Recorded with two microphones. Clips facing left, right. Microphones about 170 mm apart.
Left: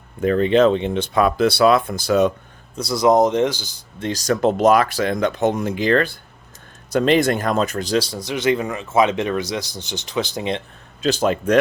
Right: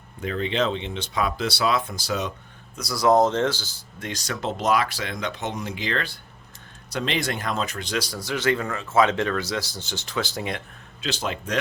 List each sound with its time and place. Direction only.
0.2 s speech: 50° left (ahead or behind)
2.7 s speech: 25° left (ahead or behind)
4.0 s speech: 40° left (ahead or behind); by 10.6 s 20° left (ahead or behind)
11.0 s speech: 45° left (ahead or behind)